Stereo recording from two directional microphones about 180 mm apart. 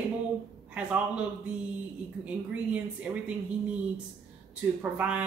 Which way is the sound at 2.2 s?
5° right (ahead or behind).